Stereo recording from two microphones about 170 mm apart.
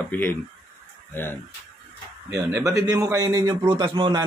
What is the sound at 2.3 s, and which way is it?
A man's voice, 15° right (ahead or behind).